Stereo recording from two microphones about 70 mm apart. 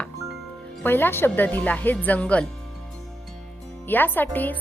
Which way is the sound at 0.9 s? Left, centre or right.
Left.